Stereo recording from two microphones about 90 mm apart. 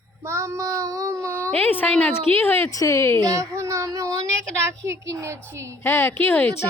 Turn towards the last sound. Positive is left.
turn(degrees=20)  # may be behind; listen again after turning